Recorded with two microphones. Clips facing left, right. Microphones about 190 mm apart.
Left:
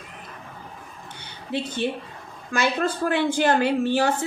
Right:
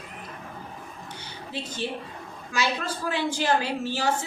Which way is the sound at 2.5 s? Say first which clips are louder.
Left 5 dB; 55° left (ahead or behind).